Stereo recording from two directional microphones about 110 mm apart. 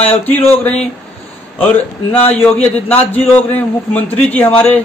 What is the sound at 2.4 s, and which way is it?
A man's voice, 15° left (ahead or behind).